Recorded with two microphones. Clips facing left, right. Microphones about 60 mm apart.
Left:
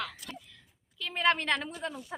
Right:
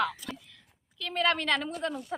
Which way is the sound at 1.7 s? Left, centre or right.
Right.